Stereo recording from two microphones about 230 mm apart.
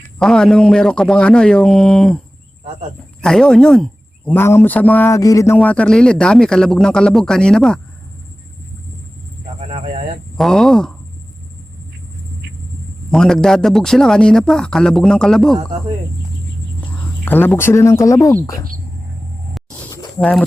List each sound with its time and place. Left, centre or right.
0.2 s a man's voice: centre
5.5 s a man's voice: centre
9.6 s a sound: right
10.3 s a man's voice: centre
13.1 s a man's voice: centre
17.2 s a man's voice: centre
19.9 s a sound: centre